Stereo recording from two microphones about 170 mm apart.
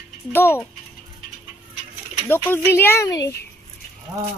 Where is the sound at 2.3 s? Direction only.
15° left (ahead or behind).